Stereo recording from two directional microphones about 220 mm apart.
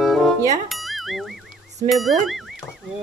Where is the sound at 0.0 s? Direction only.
Centre (ahead or behind).